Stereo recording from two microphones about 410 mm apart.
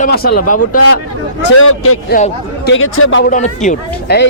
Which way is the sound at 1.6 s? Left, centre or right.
Left.